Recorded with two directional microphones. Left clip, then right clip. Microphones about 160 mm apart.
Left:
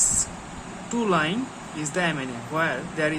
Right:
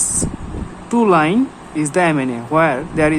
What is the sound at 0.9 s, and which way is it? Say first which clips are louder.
Speech: right 10 dB; 50° right (ahead or behind).